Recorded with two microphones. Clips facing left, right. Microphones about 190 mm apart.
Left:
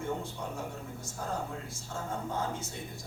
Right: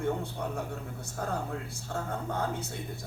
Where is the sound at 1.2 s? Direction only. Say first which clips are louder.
Right 3 dB; 60° right (ahead or behind).